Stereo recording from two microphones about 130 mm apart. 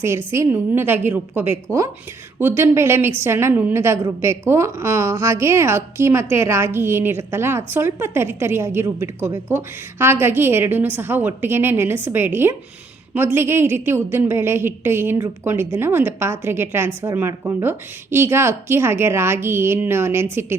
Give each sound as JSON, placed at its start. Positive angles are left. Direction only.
{"t": 0.0, "sound": "a woman's voice", "side_deg": -20}